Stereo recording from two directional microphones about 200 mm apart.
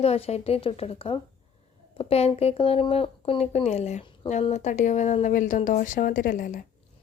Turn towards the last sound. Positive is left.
turn(degrees=45)  # may be behind; listen again after turning